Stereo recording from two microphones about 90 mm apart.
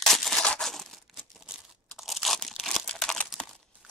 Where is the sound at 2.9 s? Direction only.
10° left (ahead or behind).